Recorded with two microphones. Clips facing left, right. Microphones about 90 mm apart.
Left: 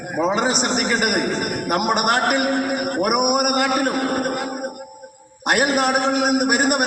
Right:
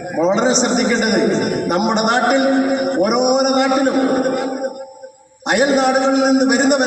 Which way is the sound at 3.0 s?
10° left (ahead or behind).